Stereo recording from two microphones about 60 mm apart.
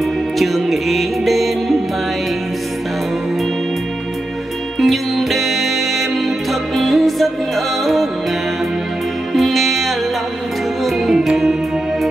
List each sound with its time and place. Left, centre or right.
0.4 s music: centre
4.7 s music: centre
9.3 s music: centre
11.1 s music: centre